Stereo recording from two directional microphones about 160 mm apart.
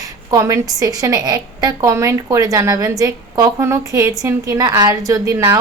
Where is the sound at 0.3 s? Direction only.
20° right (ahead or behind).